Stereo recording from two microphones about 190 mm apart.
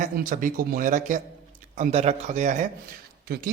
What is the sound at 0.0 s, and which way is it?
A man's voice, 45° right (ahead or behind).